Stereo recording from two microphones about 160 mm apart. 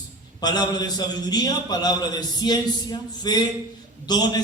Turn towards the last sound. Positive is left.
turn(degrees=25)  # may be behind; listen again after turning